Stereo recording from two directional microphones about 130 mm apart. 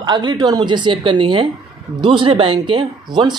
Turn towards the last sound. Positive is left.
turn(degrees=-35)  # may be behind; listen again after turning